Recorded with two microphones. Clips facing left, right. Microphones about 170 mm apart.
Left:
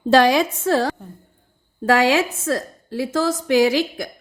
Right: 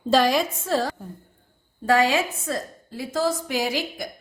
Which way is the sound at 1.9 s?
90° left.